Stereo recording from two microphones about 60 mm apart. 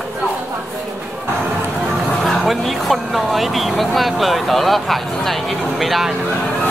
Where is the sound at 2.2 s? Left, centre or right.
Centre.